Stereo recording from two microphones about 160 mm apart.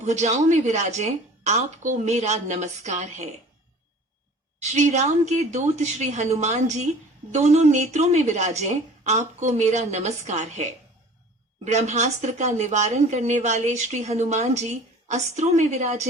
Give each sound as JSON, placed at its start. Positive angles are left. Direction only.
{"t": 0.0, "sound": "a woman's voice", "side_deg": -45}
{"t": 4.6, "sound": "a woman's voice", "side_deg": -45}